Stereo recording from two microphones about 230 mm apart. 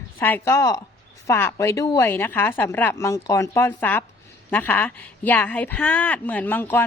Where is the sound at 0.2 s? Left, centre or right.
Centre.